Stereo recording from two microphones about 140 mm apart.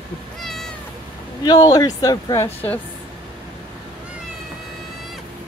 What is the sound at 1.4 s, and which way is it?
Speech, 30° left (ahead or behind).